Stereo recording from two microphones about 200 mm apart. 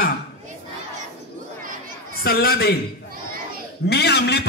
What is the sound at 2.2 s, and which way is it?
Speech, 50° left (ahead or behind).